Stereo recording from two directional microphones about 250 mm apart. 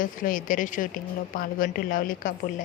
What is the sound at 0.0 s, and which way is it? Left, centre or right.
A woman's voice, left.